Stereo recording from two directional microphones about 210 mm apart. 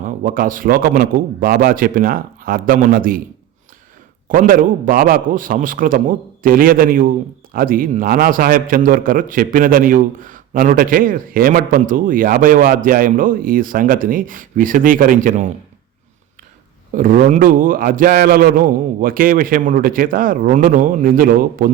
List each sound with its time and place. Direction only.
0.0 s a man's voice: 40° right (ahead or behind)
4.3 s a man's voice: 40° right (ahead or behind)
16.9 s a man's voice: 40° right (ahead or behind)